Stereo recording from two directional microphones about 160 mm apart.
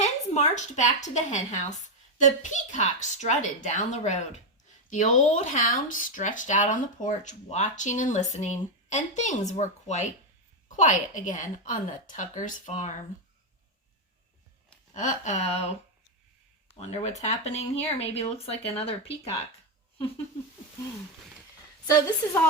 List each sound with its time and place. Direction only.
0.0 s a woman's voice: 45° left (ahead or behind)
14.9 s speech: 50° left (ahead or behind)
21.8 s a woman's voice: 20° left (ahead or behind)